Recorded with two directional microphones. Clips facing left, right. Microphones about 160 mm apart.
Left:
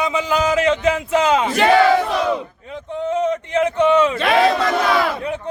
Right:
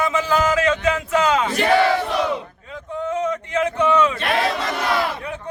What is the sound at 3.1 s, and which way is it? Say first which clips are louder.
Speech: left 4 dB; 20° left (ahead or behind).